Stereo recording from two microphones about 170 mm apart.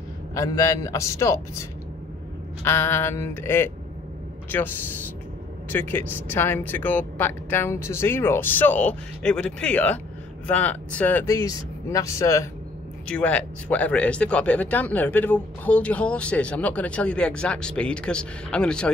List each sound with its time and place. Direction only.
0.3 s a man's voice: 20° left (ahead or behind)
2.6 s speech: 15° left (ahead or behind)